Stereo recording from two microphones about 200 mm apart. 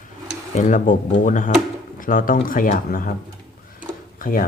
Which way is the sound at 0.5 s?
40° left (ahead or behind).